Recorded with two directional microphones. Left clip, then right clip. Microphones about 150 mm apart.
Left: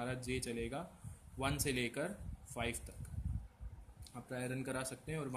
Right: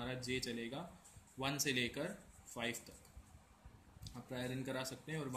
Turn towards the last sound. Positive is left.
turn(degrees=55)  # may be behind; listen again after turning